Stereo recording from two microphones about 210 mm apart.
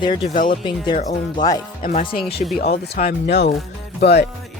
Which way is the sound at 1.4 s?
15° left (ahead or behind).